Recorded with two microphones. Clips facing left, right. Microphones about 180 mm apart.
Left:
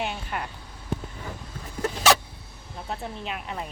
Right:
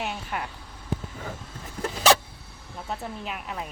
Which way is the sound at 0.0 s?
Centre (ahead or behind).